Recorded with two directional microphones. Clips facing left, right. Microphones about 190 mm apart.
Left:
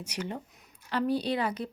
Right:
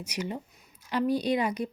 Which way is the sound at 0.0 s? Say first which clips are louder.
Right 2 dB; 10° right (ahead or behind).